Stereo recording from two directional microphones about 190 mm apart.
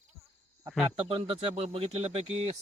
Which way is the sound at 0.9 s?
30° right (ahead or behind).